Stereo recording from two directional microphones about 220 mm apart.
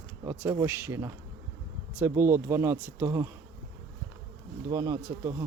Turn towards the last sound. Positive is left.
turn(degrees=-15)  # may be behind; listen again after turning